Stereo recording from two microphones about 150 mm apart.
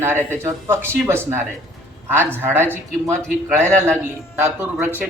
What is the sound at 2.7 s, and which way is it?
A man's voice, 15° right (ahead or behind).